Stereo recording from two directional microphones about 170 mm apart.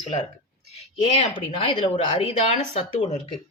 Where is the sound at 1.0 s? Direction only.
35° left (ahead or behind).